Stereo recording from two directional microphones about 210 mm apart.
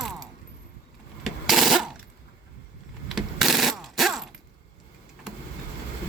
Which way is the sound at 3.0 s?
Centre (ahead or behind).